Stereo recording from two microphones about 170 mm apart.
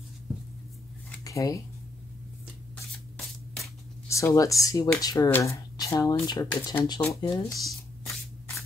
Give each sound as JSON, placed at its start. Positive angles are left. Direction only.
{"t": 1.2, "sound": "speech", "side_deg": 20}
{"t": 4.1, "sound": "speech", "side_deg": 20}